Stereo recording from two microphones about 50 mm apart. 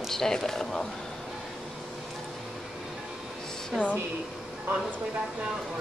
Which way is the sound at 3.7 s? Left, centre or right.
Centre.